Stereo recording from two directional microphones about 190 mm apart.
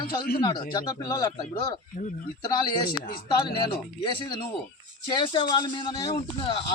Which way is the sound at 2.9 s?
55° left (ahead or behind).